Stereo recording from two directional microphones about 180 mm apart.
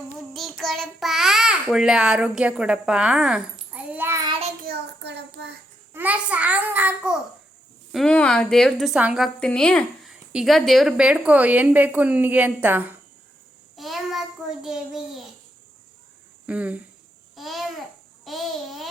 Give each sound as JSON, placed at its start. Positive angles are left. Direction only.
{"t": 0.3, "sound": "child singing", "side_deg": 0}
{"t": 1.6, "sound": "a woman's voice", "side_deg": -5}
{"t": 4.6, "sound": "child singing", "side_deg": -65}
{"t": 5.9, "sound": "a child's voice", "side_deg": -10}
{"t": 7.9, "sound": "a woman's voice", "side_deg": 5}
{"t": 13.7, "sound": "child singing", "side_deg": 0}
{"t": 14.6, "sound": "a woman's voice", "side_deg": -5}
{"t": 16.5, "sound": "speech", "side_deg": -5}
{"t": 17.3, "sound": "babbling", "side_deg": 0}
{"t": 18.3, "sound": "a child's voice", "side_deg": 0}